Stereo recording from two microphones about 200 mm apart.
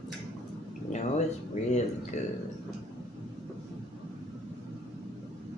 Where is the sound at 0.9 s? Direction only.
35° left (ahead or behind).